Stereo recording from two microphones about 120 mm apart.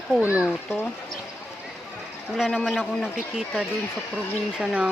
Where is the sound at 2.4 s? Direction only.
Centre (ahead or behind).